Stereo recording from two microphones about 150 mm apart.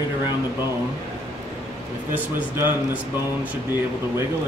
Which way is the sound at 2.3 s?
10° right (ahead or behind).